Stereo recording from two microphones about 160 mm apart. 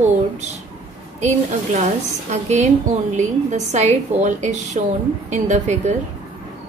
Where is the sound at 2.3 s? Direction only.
45° right (ahead or behind).